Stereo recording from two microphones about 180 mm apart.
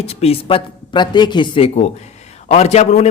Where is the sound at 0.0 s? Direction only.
35° left (ahead or behind).